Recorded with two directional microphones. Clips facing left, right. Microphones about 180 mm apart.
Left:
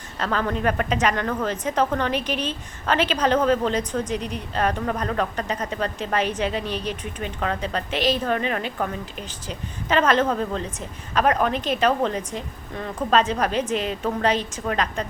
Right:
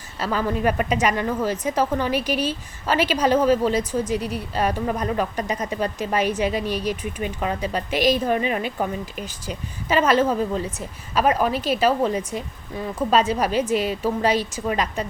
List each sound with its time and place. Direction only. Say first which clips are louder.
0.2 s a woman's voice: right 1 dB; 5° right (ahead or behind)